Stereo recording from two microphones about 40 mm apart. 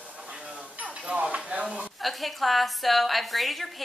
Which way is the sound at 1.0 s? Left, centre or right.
Right.